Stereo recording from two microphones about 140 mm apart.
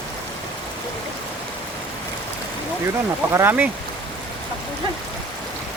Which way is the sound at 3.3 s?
15° right (ahead or behind).